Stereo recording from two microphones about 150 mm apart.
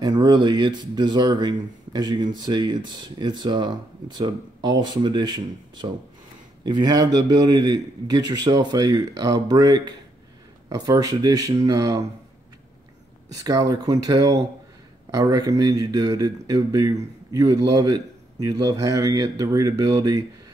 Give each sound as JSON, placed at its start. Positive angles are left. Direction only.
{"t": 0.0, "sound": "speech", "side_deg": -30}
{"t": 13.3, "sound": "speech", "side_deg": -25}